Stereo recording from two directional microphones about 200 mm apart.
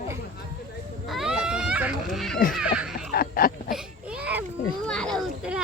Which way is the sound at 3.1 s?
45° left (ahead or behind).